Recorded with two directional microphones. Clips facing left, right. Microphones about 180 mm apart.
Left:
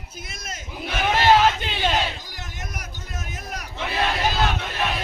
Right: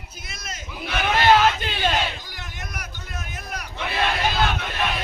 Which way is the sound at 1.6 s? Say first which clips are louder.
Even; 20° left (ahead or behind).